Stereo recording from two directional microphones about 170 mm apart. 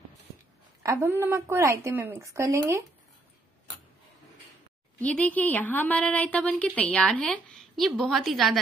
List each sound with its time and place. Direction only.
0.8 s a woman's voice: 15° right (ahead or behind)
4.9 s speech: 10° left (ahead or behind)